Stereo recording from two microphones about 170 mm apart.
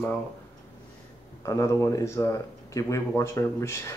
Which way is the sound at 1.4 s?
15° left (ahead or behind).